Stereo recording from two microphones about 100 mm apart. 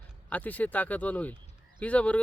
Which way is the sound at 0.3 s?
15° left (ahead or behind).